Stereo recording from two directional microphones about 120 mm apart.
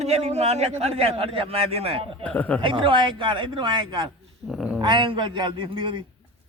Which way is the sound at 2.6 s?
45° right (ahead or behind).